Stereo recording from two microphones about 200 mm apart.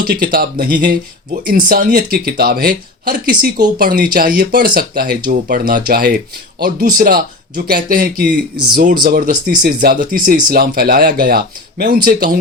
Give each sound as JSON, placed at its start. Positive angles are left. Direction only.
{"t": 0.0, "sound": "speech", "side_deg": -45}